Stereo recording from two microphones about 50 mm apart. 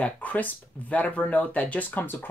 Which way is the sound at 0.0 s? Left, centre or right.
Left.